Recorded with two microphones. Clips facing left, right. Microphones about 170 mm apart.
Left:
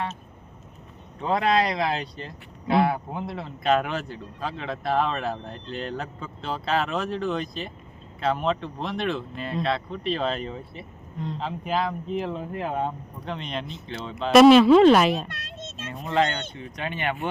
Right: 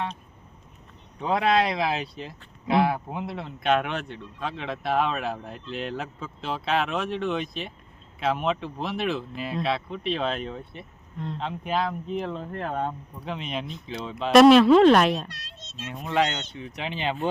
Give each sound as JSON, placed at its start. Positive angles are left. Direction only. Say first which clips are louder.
{"t": 1.2, "sound": "speech", "louder": "even", "side_deg": 0}
{"t": 13.1, "sound": "speech", "louder": "even", "side_deg": -5}
{"t": 15.3, "sound": "children playing", "louder": "left 7 dB", "side_deg": 50}
{"t": 16.7, "sound": "speech", "louder": "even", "side_deg": -15}